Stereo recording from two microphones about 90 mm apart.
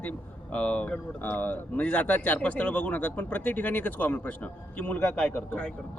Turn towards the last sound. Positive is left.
turn(degrees=15)  # may be behind; listen again after turning